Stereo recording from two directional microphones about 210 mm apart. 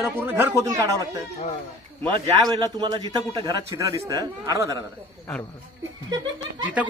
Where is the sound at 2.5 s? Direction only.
20° right (ahead or behind).